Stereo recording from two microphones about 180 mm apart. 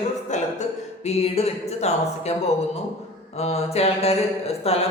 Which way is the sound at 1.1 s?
35° left (ahead or behind).